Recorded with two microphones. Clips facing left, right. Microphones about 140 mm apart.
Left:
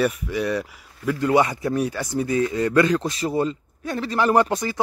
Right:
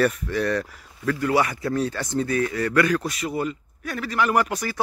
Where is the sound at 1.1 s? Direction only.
20° left (ahead or behind).